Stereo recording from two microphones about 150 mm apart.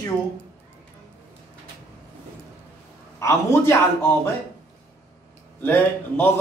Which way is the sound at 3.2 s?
20° left (ahead or behind).